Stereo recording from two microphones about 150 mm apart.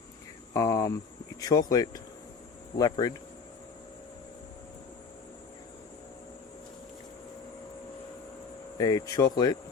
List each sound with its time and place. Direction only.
0.5 s speech: 20° left (ahead or behind)
8.8 s speech: 25° left (ahead or behind)